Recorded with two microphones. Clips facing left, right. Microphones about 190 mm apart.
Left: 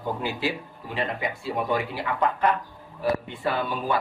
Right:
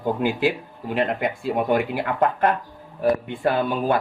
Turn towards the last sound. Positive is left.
turn(degrees=-55)  # may be behind; listen again after turning